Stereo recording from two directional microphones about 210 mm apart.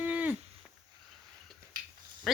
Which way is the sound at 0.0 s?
10° right (ahead or behind).